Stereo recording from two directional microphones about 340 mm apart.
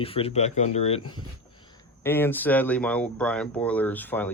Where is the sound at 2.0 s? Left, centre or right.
Centre.